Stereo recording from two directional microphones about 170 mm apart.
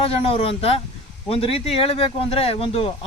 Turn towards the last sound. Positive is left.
turn(degrees=35)  # may be behind; listen again after turning